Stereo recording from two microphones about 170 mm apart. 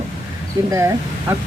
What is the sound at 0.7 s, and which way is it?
Speech, 15° right (ahead or behind).